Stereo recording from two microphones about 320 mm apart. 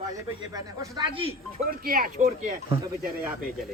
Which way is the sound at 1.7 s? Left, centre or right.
Right.